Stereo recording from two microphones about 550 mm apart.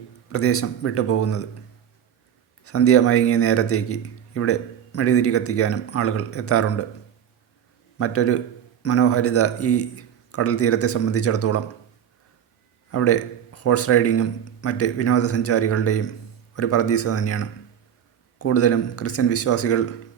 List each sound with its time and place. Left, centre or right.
0.3 s a man's voice: left
2.6 s a man's voice: left
7.9 s a man's voice: left
12.9 s a man's voice: left